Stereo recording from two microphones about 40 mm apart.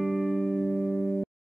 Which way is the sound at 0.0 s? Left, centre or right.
Centre.